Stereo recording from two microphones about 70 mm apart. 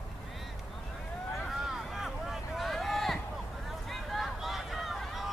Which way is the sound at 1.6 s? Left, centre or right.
Centre.